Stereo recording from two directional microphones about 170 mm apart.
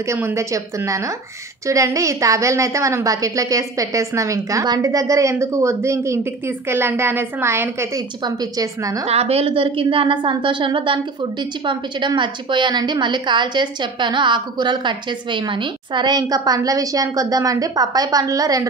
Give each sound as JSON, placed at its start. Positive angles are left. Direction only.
{"t": 0.0, "sound": "a woman's voice", "side_deg": -15}
{"t": 9.0, "sound": "a woman's voice", "side_deg": -35}